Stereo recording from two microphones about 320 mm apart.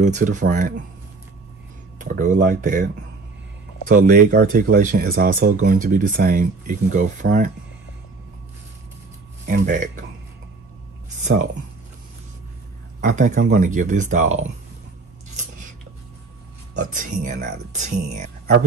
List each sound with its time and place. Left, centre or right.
0.0 s speech: right
2.0 s speech: right
3.9 s speech: right
9.5 s speech: right
11.1 s a sound: right
13.0 s speech: right
16.7 s speech: right